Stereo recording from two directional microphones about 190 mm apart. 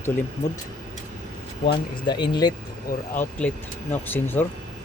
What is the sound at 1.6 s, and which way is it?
Speech, 25° left (ahead or behind).